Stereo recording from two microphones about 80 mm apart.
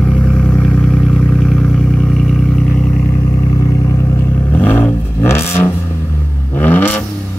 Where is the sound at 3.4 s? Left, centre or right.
Left.